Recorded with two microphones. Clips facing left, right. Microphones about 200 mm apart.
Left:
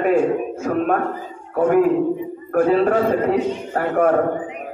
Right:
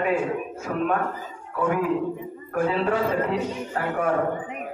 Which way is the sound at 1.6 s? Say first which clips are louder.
Left 8 dB; 45° left (ahead or behind).